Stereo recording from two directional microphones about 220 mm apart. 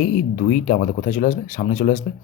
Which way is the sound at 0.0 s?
35° left (ahead or behind).